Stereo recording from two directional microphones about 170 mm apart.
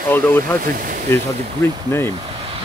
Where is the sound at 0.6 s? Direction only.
55° right (ahead or behind).